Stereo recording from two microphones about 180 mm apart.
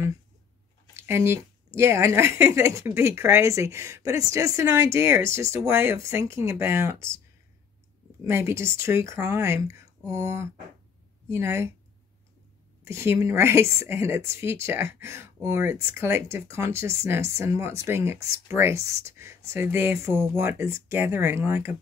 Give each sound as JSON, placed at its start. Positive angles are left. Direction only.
{"t": 0.9, "sound": "speech", "side_deg": -15}
{"t": 8.2, "sound": "speech", "side_deg": -15}
{"t": 12.8, "sound": "speech", "side_deg": -15}